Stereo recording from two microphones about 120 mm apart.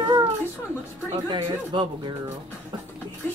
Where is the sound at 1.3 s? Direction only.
40° right (ahead or behind).